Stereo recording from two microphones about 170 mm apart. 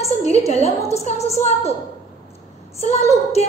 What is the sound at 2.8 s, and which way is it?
Speech, 40° left (ahead or behind).